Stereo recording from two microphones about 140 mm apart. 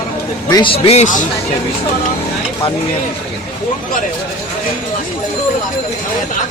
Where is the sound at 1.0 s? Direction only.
65° left (ahead or behind).